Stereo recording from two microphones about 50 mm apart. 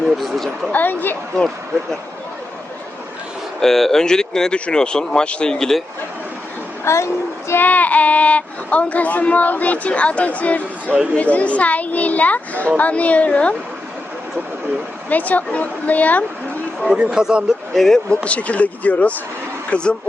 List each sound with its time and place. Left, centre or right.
0.0 s speech: centre
0.7 s a woman's voice: left
3.6 s speech: centre
6.8 s speech: left
7.6 s speech: left
15.1 s a woman's voice: left
17.0 s speech: centre
17.7 s speech: centre
18.1 s speech: left
19.7 s speech: centre